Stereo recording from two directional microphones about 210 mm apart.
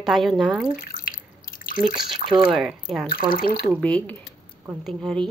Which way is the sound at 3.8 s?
5° left (ahead or behind).